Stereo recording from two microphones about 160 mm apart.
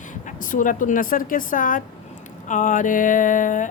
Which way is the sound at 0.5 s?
55° left (ahead or behind).